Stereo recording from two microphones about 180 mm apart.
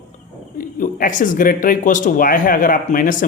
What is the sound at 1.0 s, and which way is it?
Speech, 45° left (ahead or behind).